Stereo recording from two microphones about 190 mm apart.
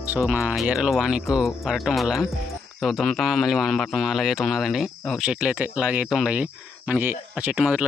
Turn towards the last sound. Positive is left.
turn(degrees=-5)  # may be behind; listen again after turning